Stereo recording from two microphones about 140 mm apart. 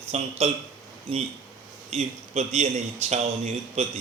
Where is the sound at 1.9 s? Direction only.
55° right (ahead or behind).